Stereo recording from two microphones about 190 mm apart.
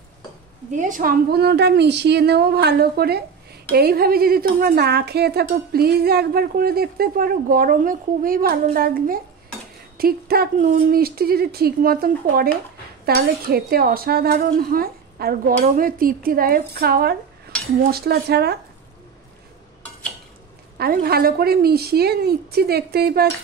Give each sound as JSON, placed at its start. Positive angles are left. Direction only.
{"t": 0.7, "sound": "a woman's voice", "side_deg": -40}
{"t": 20.7, "sound": "a woman's voice", "side_deg": -55}